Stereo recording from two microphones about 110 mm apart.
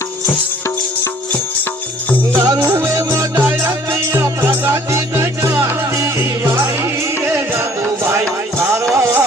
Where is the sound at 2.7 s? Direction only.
25° right (ahead or behind).